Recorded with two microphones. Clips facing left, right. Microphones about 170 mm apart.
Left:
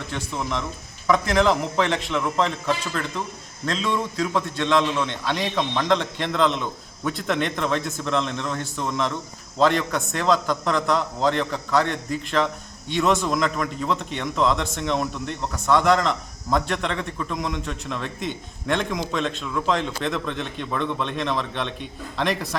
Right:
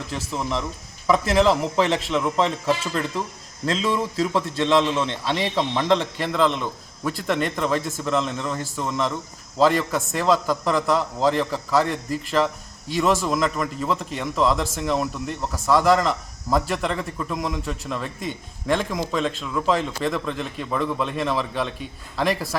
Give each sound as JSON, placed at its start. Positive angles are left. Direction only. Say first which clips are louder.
{"t": 0.1, "sound": "speech", "louder": "right 1 dB", "side_deg": -5}
{"t": 4.9, "sound": "a man's voice", "louder": "right 1 dB", "side_deg": -30}
{"t": 5.3, "sound": "speech", "louder": "right 2 dB", "side_deg": -5}